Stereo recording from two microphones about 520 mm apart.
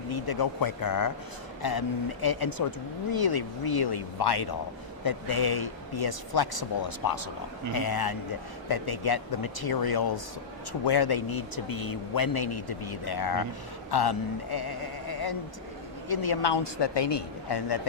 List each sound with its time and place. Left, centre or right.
0.1 s speech: left